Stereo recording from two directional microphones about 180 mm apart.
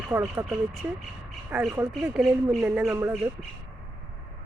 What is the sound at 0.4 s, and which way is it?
Speech, centre (ahead or behind).